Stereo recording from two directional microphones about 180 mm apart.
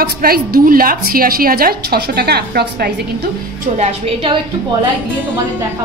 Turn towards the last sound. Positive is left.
turn(degrees=-35)  # may be behind; listen again after turning